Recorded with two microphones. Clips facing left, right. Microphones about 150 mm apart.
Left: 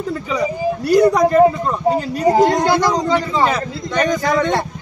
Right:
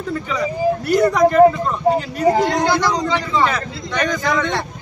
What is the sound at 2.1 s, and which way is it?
Speech, 35° left (ahead or behind).